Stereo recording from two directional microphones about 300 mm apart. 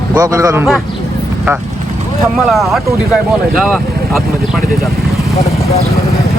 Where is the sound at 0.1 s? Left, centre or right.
Centre.